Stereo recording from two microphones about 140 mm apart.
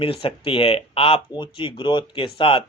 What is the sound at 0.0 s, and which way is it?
Speech, 40° left (ahead or behind).